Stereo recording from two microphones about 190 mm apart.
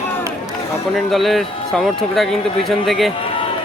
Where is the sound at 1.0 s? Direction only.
Centre (ahead or behind).